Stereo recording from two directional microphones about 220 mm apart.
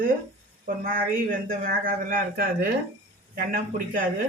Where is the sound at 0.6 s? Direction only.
40° right (ahead or behind).